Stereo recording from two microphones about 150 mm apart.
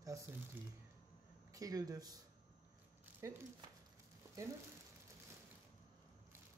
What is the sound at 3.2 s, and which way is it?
Speech, 20° right (ahead or behind).